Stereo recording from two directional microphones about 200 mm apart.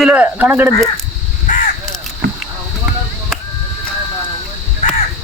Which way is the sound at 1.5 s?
40° left (ahead or behind).